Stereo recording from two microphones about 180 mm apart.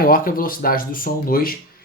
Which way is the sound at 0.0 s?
50° left (ahead or behind).